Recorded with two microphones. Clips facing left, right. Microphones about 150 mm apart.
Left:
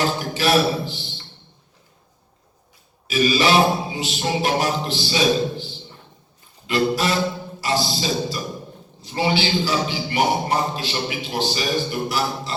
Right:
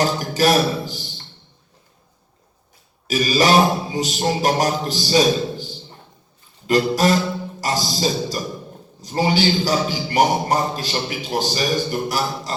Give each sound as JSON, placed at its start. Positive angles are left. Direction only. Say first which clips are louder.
{"t": 0.0, "sound": "a man's voice", "louder": "right 3 dB", "side_deg": -40}
{"t": 3.1, "sound": "a man's voice", "louder": "right 1 dB", "side_deg": -40}